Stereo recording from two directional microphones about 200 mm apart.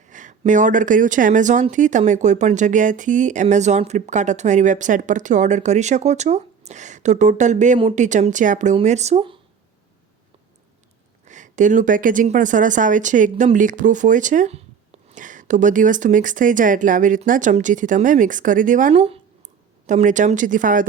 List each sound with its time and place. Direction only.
0.1 s speech: 40° right (ahead or behind)
11.3 s speech: 40° right (ahead or behind)